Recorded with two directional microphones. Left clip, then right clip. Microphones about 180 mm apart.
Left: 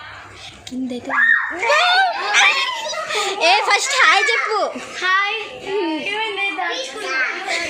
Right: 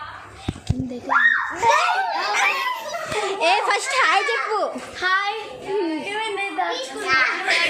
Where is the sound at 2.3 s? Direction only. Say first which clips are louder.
Left 7 dB; 5° left (ahead or behind).